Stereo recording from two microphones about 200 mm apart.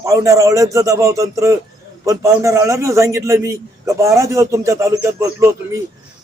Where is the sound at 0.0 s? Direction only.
15° right (ahead or behind).